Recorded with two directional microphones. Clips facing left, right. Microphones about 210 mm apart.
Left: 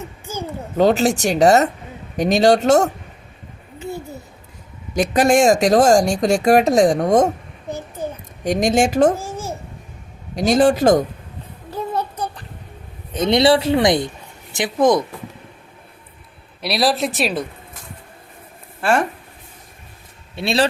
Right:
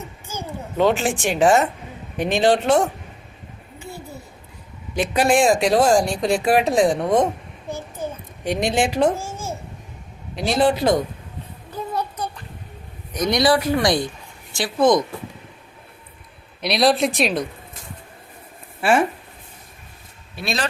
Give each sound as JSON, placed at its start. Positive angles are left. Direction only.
{"t": 0.8, "sound": "speech", "side_deg": 40}
{"t": 4.9, "sound": "speech", "side_deg": 45}
{"t": 8.4, "sound": "speech", "side_deg": 45}
{"t": 10.3, "sound": "speech", "side_deg": 45}
{"t": 13.1, "sound": "a man's voice", "side_deg": 25}
{"t": 16.6, "sound": "speech", "side_deg": 0}
{"t": 18.8, "sound": "speech", "side_deg": -5}
{"t": 20.3, "sound": "a man's voice", "side_deg": 30}